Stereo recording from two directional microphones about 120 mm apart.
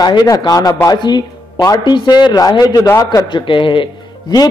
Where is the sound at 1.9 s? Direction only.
40° left (ahead or behind).